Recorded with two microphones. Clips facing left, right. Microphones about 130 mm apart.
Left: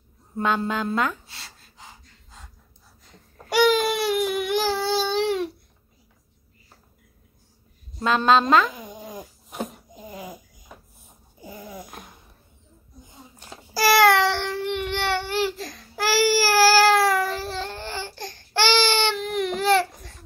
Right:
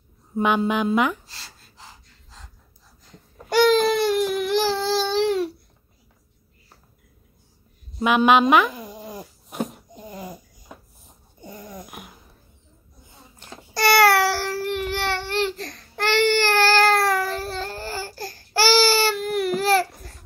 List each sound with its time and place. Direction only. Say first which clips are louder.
0.4 s speech: right 3 dB; 15° right (ahead or behind)
1.2 s gasp: even; centre (ahead or behind)
3.4 s baby cry: right 2 dB; 5° left (ahead or behind)
8.0 s speech: right 2 dB; 15° right (ahead or behind)
8.7 s a sound: right 1 dB; centre (ahead or behind)
13.4 s baby cry: even; 10° left (ahead or behind)